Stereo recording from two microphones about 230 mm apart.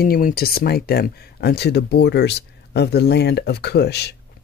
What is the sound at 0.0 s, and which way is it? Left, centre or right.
A man's voice, left.